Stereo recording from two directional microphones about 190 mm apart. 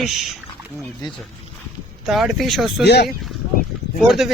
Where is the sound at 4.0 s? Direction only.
Centre (ahead or behind).